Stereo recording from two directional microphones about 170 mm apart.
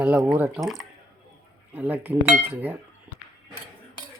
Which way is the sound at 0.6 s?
Centre (ahead or behind).